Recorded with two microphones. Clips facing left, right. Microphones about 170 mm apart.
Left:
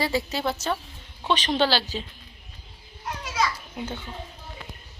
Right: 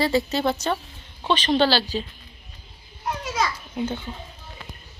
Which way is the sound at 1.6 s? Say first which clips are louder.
Right 3 dB; 20° left (ahead or behind).